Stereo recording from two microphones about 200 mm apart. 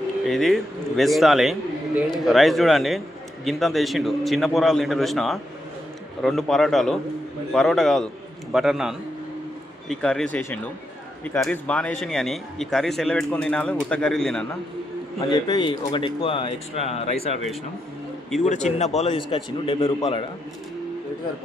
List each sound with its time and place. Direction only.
0.2 s a man's voice: centre (ahead or behind)
15.1 s speech: 20° left (ahead or behind)
18.4 s speech: 35° left (ahead or behind)